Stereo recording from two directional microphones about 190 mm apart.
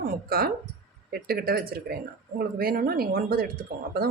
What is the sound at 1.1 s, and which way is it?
Speech, 55° right (ahead or behind).